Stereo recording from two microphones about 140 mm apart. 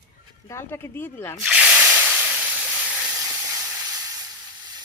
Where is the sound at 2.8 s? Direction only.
5° right (ahead or behind).